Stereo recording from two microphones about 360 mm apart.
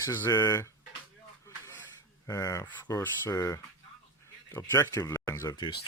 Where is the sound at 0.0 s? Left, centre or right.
Centre.